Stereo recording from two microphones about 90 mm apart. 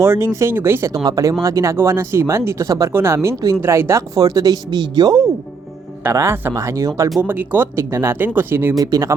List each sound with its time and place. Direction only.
0.0 s speech: 30° right (ahead or behind)
1.0 s speech: 40° right (ahead or behind)
6.0 s speech: 30° right (ahead or behind)
7.2 s speech: 20° right (ahead or behind)
8.8 s speech: 40° right (ahead or behind)